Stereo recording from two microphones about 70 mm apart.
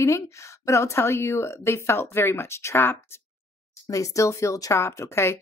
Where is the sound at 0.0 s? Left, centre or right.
Left.